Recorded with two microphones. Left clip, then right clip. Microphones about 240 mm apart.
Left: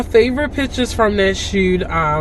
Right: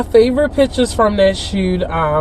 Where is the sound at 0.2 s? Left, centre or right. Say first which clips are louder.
Right 4 dB; centre.